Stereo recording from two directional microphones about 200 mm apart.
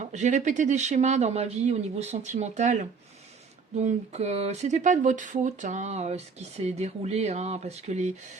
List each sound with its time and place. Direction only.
0.0 s speech: 35° right (ahead or behind)